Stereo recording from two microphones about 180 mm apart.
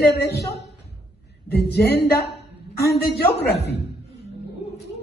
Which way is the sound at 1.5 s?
65° left (ahead or behind).